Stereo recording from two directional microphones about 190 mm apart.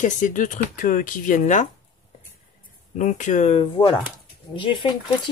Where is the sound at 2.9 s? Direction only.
40° left (ahead or behind); by 5.0 s 25° left (ahead or behind).